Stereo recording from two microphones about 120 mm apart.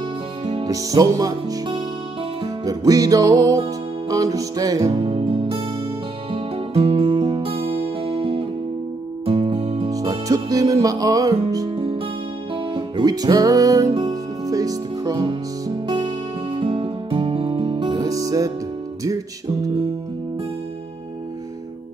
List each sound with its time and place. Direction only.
0.7 s music: 30° right (ahead or behind)
5.0 s music: 45° right (ahead or behind)
9.8 s music: 30° right (ahead or behind)
11.7 s music: 50° right (ahead or behind); by 15.2 s 30° right (ahead or behind)
15.2 s music: 45° right (ahead or behind)